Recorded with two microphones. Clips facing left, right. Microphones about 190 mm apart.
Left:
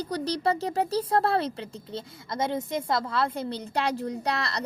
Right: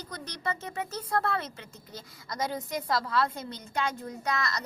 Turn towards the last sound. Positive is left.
turn(degrees=35)  # may be behind; listen again after turning